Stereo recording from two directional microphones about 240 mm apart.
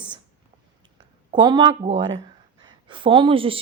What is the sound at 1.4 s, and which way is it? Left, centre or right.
A woman's voice, centre.